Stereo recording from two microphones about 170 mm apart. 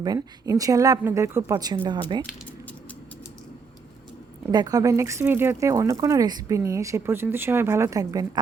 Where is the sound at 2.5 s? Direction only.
10° left (ahead or behind).